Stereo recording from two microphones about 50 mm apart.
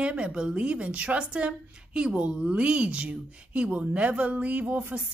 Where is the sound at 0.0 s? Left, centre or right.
Centre.